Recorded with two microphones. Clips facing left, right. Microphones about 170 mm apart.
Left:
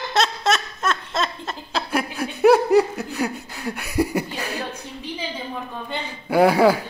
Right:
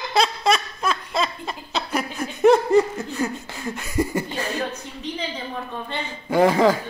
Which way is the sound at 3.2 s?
10° left (ahead or behind).